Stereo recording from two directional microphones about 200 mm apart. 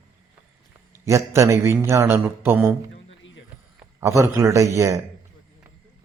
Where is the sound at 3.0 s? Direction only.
70° left (ahead or behind).